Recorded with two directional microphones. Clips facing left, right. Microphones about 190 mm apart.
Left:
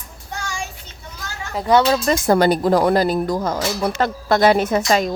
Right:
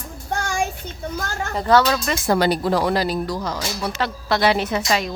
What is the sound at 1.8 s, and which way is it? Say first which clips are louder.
Speech: left 4 dB; 35° left (ahead or behind).